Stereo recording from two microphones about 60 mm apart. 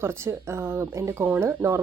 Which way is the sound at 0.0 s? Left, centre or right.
Right.